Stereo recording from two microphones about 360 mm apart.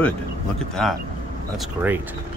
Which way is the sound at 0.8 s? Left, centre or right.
Centre.